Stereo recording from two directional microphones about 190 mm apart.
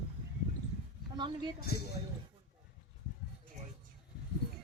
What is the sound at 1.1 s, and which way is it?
Speech, 25° right (ahead or behind).